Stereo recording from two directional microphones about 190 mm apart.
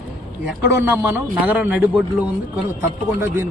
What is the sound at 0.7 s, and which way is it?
Speech, 10° right (ahead or behind).